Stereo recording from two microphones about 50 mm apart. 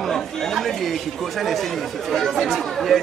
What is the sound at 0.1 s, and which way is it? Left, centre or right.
Chatter, centre.